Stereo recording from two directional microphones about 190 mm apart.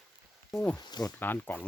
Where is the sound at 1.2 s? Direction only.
10° left (ahead or behind).